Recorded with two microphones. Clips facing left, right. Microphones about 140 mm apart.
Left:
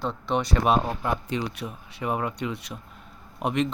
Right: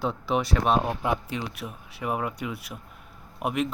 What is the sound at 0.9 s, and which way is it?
Speech, 15° right (ahead or behind).